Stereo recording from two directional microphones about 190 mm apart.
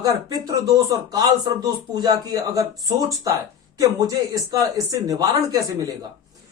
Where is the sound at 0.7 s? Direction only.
20° right (ahead or behind).